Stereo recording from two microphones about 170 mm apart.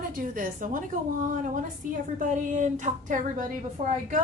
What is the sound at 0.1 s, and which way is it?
Speech, 55° right (ahead or behind).